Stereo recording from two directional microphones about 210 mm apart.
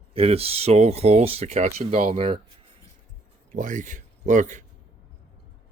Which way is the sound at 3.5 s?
40° right (ahead or behind).